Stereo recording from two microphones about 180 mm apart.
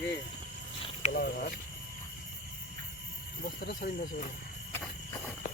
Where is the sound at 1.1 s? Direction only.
55° left (ahead or behind).